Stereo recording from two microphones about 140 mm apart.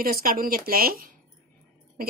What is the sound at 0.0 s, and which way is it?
Speech, 90° right.